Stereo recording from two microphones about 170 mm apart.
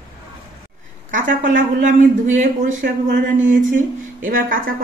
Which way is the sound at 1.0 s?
50° right (ahead or behind).